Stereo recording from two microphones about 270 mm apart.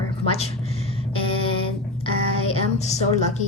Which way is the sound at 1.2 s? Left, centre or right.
Centre.